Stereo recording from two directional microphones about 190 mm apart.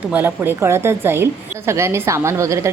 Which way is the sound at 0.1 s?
10° right (ahead or behind).